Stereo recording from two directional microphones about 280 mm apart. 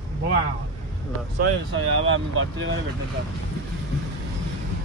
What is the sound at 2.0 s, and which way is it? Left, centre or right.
Speech, right.